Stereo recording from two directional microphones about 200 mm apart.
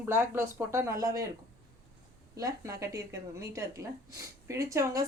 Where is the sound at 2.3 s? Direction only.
15° right (ahead or behind).